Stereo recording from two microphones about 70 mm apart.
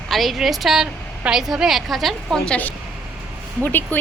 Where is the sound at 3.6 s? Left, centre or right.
Left.